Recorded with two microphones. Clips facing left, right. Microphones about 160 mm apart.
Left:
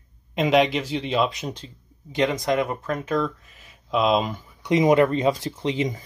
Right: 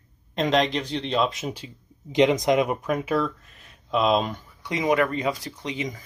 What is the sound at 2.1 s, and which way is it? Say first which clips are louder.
Speech: right 3 dB; 20° right (ahead or behind).